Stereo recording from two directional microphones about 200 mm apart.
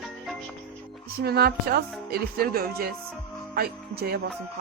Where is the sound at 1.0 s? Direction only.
50° right (ahead or behind).